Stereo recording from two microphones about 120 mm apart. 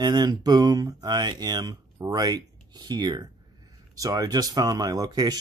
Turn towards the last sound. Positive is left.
turn(degrees=-35)  # may be behind; listen again after turning